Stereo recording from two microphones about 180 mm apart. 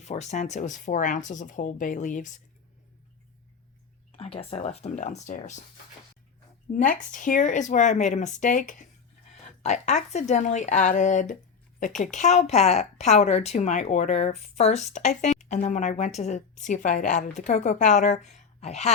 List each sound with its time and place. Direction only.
0.0 s speech: 40° left (ahead or behind)
4.2 s a woman's voice: 35° left (ahead or behind)
6.7 s a woman's voice: 45° left (ahead or behind)
18.3 s a sound: 40° left (ahead or behind)